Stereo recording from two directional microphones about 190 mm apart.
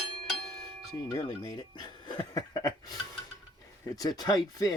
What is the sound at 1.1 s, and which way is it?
Speech, 20° left (ahead or behind).